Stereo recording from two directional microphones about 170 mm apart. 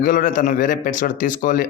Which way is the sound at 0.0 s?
50° left (ahead or behind).